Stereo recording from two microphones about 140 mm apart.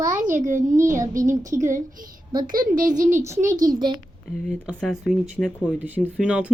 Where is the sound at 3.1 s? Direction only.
20° right (ahead or behind).